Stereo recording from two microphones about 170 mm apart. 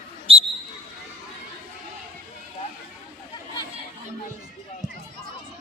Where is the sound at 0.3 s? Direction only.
35° right (ahead or behind).